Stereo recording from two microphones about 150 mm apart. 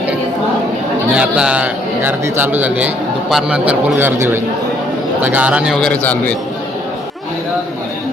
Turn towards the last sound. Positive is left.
turn(degrees=10)  # may be behind; listen again after turning